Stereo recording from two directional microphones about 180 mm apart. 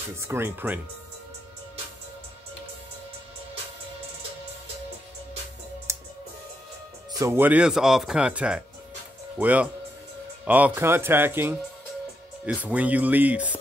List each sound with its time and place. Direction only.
0.1 s speech: 15° right (ahead or behind)
5.9 s music: 15° right (ahead or behind)
7.2 s speech: 15° right (ahead or behind)